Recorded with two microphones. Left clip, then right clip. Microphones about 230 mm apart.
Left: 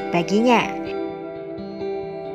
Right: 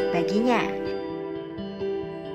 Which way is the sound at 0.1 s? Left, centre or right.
Left.